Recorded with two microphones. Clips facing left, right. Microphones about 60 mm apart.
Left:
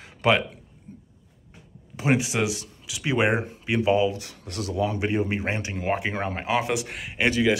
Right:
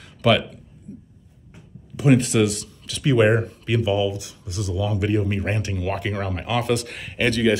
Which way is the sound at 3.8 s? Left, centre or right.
Left.